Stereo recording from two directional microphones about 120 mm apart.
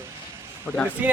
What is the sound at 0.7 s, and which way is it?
Speech, 10° left (ahead or behind).